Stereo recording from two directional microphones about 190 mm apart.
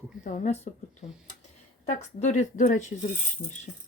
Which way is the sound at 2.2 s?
40° left (ahead or behind).